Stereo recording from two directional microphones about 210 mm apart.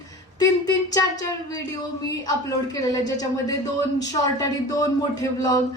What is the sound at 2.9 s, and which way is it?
Speech, 15° left (ahead or behind).